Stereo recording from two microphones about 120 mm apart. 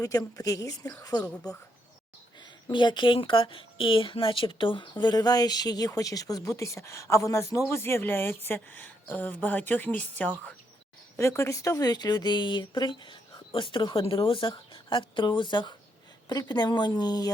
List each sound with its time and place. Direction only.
0.0 s a woman's voice: 30° left (ahead or behind)
2.6 s a woman's voice: 40° left (ahead or behind); by 10.5 s 10° left (ahead or behind)
11.2 s a woman's voice: 25° left (ahead or behind)